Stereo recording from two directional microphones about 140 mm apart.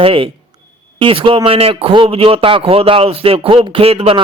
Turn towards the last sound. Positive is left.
turn(degrees=-45)  # may be behind; listen again after turning